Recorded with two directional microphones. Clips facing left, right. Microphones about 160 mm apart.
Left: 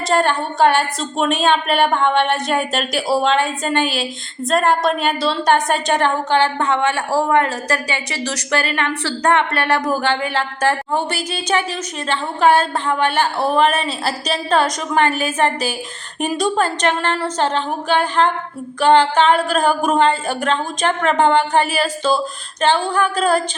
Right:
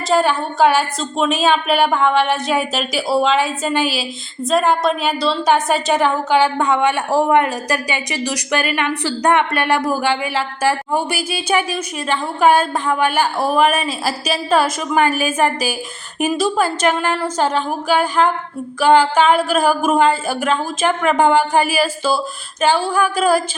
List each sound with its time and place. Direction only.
0.1 s a woman's voice: 5° right (ahead or behind)